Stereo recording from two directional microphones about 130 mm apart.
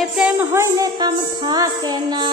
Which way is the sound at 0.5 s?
25° right (ahead or behind).